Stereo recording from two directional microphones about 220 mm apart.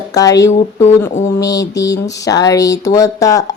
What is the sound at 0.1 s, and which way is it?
Speech, 15° left (ahead or behind).